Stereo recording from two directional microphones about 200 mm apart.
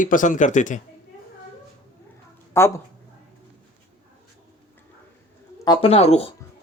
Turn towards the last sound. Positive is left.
turn(degrees=30)  # may be behind; listen again after turning